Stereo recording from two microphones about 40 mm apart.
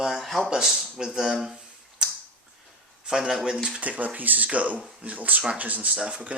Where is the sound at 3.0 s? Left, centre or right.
Centre.